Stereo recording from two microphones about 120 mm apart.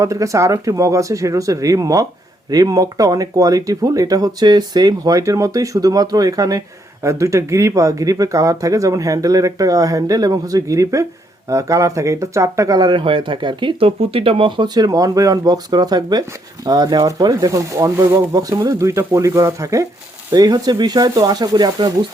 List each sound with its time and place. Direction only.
0.0 s speech: 25° right (ahead or behind)